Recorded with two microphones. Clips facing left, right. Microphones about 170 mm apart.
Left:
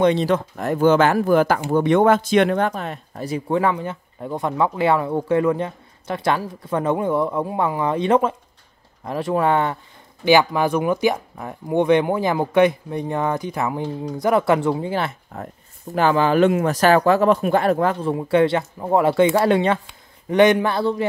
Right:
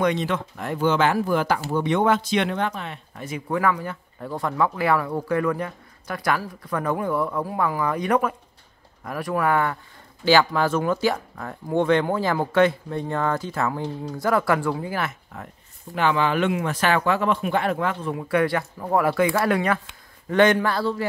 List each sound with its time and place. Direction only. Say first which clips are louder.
0.0 s speech: left 5 dB; 35° left (ahead or behind)